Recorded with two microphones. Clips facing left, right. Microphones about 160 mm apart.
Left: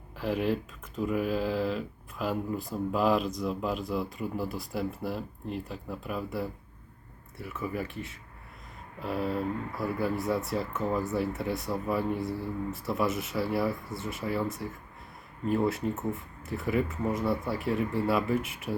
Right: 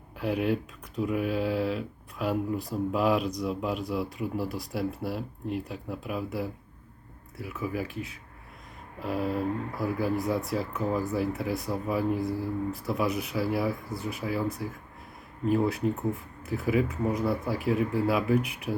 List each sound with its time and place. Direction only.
0.2 s speech: centre (ahead or behind)